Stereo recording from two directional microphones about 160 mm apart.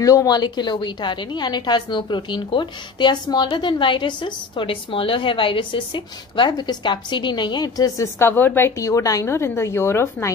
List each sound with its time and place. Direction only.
0.0 s a woman's voice: 20° left (ahead or behind)